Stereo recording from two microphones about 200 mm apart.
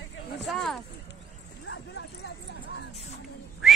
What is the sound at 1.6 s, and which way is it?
Bow-wow, 65° left (ahead or behind).